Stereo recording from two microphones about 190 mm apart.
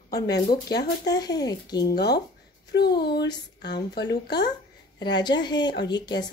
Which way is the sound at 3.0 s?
60° left (ahead or behind).